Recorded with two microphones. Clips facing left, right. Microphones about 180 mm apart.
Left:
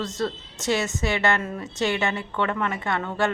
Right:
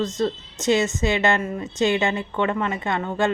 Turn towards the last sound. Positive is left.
turn(degrees=-15)  # may be behind; listen again after turning